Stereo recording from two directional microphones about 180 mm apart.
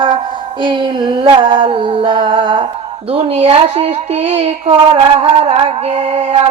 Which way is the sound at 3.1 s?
35° right (ahead or behind).